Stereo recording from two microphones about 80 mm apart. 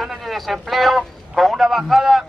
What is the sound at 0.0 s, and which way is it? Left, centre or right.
A man's voice, centre.